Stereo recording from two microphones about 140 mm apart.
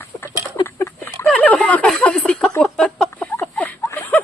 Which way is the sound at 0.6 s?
20° left (ahead or behind).